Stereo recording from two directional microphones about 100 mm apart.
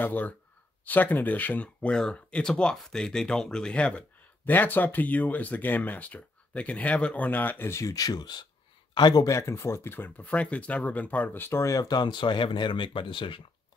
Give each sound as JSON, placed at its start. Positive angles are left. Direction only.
{"t": 0.0, "sound": "speech", "side_deg": 15}